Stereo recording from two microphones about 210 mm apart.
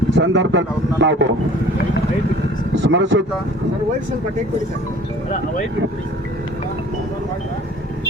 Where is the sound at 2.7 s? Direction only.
60° right (ahead or behind).